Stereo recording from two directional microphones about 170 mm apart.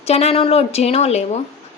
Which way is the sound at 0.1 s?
35° left (ahead or behind).